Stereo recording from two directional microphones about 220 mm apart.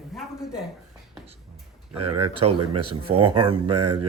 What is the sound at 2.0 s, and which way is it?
Speech, 90° right.